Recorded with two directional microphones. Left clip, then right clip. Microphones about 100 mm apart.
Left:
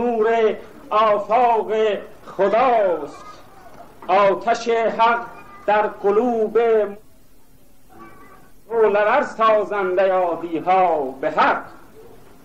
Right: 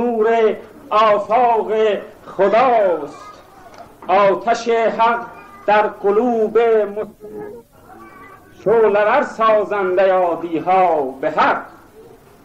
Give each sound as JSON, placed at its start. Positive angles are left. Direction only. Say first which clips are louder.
{"t": 0.1, "sound": "a man's voice", "louder": "right 3 dB", "side_deg": 40}
{"t": 8.9, "sound": "a man's voice", "louder": "right 2 dB", "side_deg": 30}